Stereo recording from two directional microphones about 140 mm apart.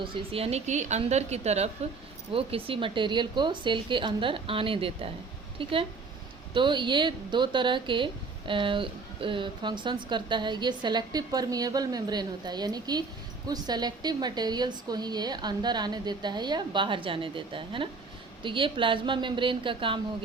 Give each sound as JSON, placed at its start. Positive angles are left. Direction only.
{"t": 0.0, "sound": "a woman's voice", "side_deg": -40}